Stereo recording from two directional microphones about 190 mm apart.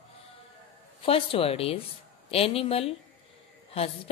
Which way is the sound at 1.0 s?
30° left (ahead or behind).